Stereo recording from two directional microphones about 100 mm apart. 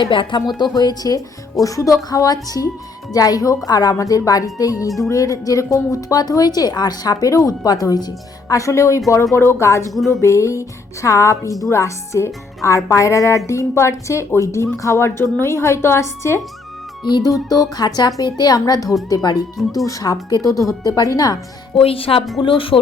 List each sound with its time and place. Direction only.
0.0 s a woman's voice: 55° left (ahead or behind); by 16.4 s 25° left (ahead or behind)
17.0 s speech: 50° left (ahead or behind)
21.8 s speech: 65° left (ahead or behind)